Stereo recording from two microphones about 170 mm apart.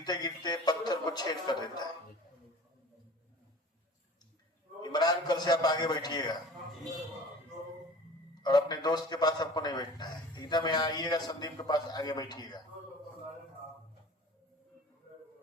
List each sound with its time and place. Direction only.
0.0 s a man's voice: 25° left (ahead or behind)
4.8 s a man's voice: 25° left (ahead or behind)
8.4 s a man's voice: 25° left (ahead or behind)